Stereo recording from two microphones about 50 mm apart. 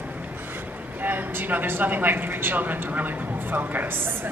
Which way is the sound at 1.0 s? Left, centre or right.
Right.